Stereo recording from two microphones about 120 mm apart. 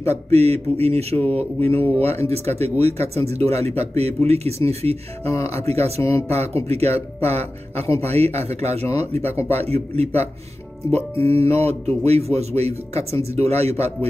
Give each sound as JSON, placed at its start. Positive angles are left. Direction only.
{"t": 0.0, "sound": "speech", "side_deg": -60}
{"t": 1.7, "sound": "speech", "side_deg": 20}
{"t": 2.2, "sound": "speech", "side_deg": -60}
{"t": 6.0, "sound": "speech", "side_deg": 25}
{"t": 6.3, "sound": "speech", "side_deg": -60}
{"t": 11.1, "sound": "speech", "side_deg": 25}
{"t": 11.4, "sound": "speech", "side_deg": -60}